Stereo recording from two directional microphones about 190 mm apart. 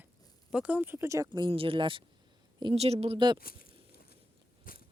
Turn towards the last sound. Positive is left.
turn(degrees=45)  # may be behind; listen again after turning